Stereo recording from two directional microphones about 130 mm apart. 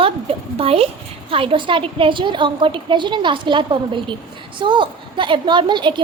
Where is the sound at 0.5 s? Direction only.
50° right (ahead or behind).